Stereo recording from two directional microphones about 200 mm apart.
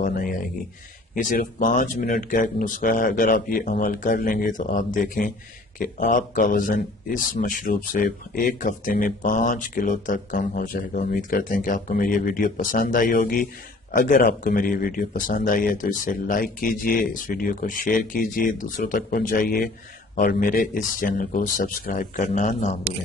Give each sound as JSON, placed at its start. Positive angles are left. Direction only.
{"t": 0.0, "sound": "a man's voice", "side_deg": 45}